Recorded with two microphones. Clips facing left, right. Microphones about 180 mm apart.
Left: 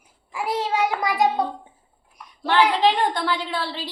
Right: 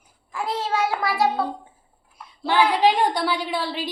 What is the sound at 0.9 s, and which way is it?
Speech, 20° left (ahead or behind).